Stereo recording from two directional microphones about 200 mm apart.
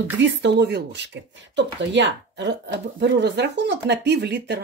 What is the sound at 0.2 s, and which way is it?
Speech, 60° right (ahead or behind).